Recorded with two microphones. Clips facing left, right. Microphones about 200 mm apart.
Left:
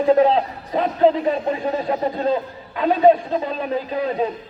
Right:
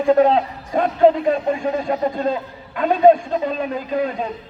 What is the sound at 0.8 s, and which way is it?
Speech, 45° right (ahead or behind).